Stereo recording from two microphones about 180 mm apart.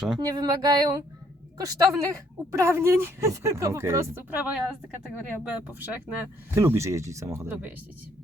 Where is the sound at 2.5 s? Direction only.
15° right (ahead or behind).